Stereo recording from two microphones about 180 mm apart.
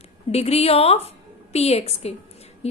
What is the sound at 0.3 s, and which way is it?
A woman's voice, 35° left (ahead or behind).